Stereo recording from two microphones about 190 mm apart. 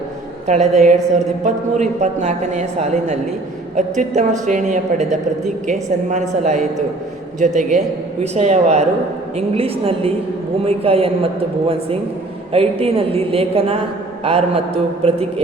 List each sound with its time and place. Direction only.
0.4 s a woman's voice: 40° right (ahead or behind)
12.5 s a woman's voice: 30° right (ahead or behind)